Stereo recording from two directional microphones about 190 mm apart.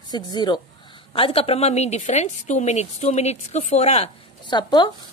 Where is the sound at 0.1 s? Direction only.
20° left (ahead or behind).